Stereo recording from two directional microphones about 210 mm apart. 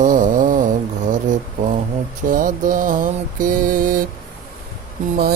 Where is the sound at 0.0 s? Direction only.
40° right (ahead or behind).